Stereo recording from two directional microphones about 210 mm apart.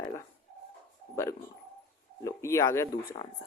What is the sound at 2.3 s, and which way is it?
Speech, 15° left (ahead or behind).